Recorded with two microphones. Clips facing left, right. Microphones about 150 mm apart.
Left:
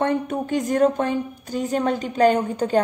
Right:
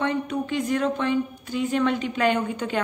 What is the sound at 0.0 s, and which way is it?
A woman's voice, 50° left (ahead or behind).